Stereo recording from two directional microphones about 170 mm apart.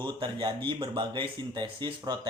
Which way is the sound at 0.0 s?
30° right (ahead or behind).